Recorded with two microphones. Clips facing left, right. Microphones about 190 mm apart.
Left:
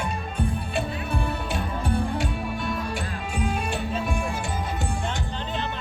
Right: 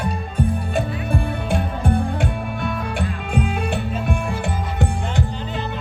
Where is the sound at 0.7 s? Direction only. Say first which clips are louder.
Right 5 dB; 50° right (ahead or behind).